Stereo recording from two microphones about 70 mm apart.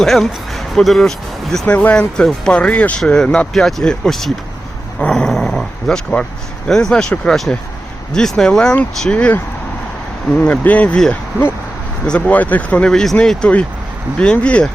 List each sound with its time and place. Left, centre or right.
0.0 s speech: centre
1.6 s speech: left
3.0 s speech: centre
4.9 s dog: centre
5.5 s speech: centre
11.1 s speech: left
12.0 s speech: centre
12.9 s speech: centre